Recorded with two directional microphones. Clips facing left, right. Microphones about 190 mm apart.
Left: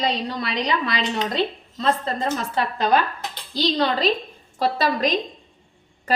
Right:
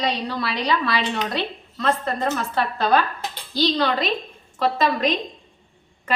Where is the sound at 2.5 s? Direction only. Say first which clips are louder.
Even; 15° left (ahead or behind).